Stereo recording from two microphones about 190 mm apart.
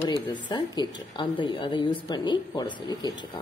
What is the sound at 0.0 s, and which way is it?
A woman's voice, 20° left (ahead or behind).